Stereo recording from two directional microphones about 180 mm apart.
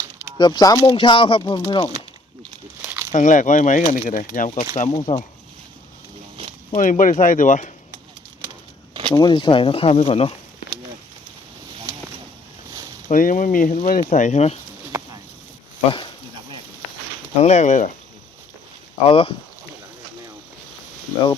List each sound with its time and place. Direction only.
0.3 s speech: 25° left (ahead or behind)
2.4 s a sound: 5° right (ahead or behind)
3.1 s speech: 45° left (ahead or behind)
4.9 s speech: 30° left (ahead or behind)
6.7 s speech: 45° left (ahead or behind)
8.9 s a sound: 25° right (ahead or behind)
9.1 s speech: 25° left (ahead or behind)
13.1 s speech: 45° left (ahead or behind)
17.4 s speech: 40° left (ahead or behind)
19.0 s speech: 30° left (ahead or behind)